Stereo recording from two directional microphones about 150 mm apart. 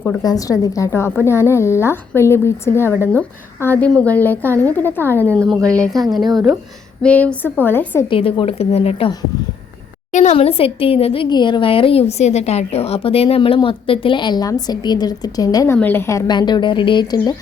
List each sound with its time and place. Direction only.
0.0 s a woman's voice: 20° left (ahead or behind); by 6.1 s 5° left (ahead or behind)
6.3 s speech: 5° right (ahead or behind)
7.0 s a woman's voice: 10° left (ahead or behind)
8.0 s a woman's voice: 35° left (ahead or behind)
10.1 s a woman's voice: 55° left (ahead or behind)
10.3 s a woman's voice: 40° left (ahead or behind)